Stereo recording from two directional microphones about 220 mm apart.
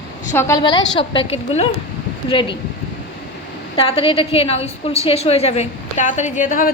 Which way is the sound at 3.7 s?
25° left (ahead or behind).